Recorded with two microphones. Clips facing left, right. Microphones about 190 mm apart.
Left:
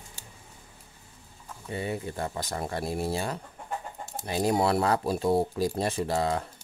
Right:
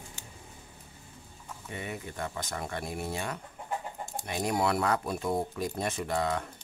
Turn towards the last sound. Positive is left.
turn(degrees=30)  # may be behind; listen again after turning